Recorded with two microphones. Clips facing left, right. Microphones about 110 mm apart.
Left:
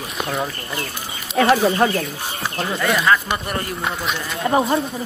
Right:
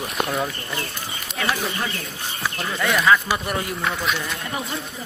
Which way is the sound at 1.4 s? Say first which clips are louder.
Left 10 dB; 60° left (ahead or behind).